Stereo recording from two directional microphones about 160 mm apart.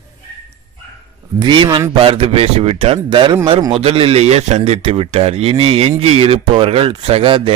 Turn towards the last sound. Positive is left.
turn(degrees=-35)  # may be behind; listen again after turning